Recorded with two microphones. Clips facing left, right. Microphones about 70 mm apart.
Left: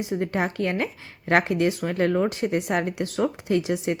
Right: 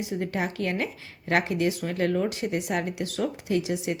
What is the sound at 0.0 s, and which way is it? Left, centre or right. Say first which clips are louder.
Speech: left 3 dB; left.